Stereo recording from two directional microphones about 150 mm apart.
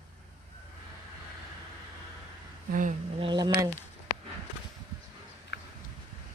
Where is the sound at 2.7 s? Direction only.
60° right (ahead or behind).